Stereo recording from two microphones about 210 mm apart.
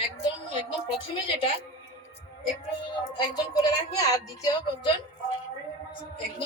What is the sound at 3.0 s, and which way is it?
Speech, 15° left (ahead or behind).